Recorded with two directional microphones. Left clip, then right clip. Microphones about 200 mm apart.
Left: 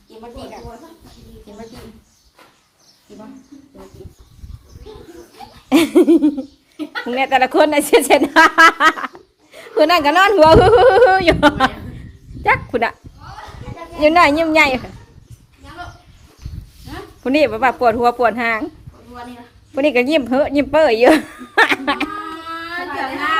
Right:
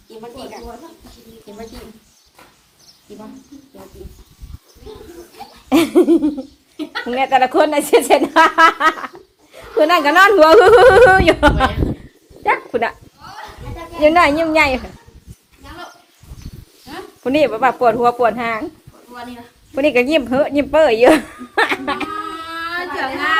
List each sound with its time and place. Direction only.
5.6 s speech: 15° left (ahead or behind)
9.7 s a woman's voice: 10° left (ahead or behind)
12.4 s a sound: 25° left (ahead or behind)
12.8 s a sound: 15° left (ahead or behind)
14.0 s a woman's voice: 10° left (ahead or behind)
17.2 s a woman's voice: 15° left (ahead or behind)
19.7 s a woman's voice: 10° left (ahead or behind)
21.5 s chuckle: 25° left (ahead or behind)
22.5 s a sound: 5° right (ahead or behind)